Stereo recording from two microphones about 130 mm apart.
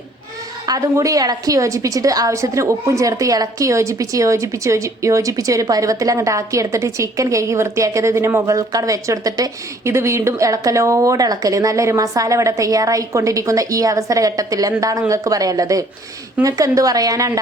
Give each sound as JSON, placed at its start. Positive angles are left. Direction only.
{"t": 0.6, "sound": "a woman's voice", "side_deg": -25}